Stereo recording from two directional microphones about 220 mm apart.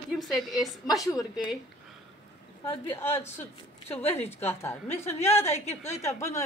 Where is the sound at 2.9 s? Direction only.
10° left (ahead or behind).